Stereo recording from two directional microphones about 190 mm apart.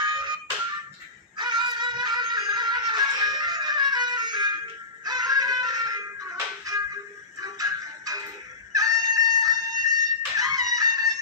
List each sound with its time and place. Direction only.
0.0 s music: 25° right (ahead or behind)
1.4 s music: 25° right (ahead or behind)
7.6 s music: 20° right (ahead or behind)